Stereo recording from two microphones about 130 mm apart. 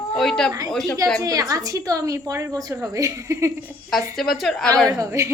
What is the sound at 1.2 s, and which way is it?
A woman's voice, 25° right (ahead or behind).